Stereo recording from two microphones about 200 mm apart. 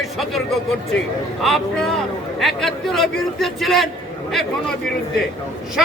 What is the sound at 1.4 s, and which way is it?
A man's voice, centre (ahead or behind).